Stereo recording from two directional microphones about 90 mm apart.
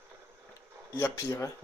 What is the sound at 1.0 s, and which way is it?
Speech, 30° left (ahead or behind).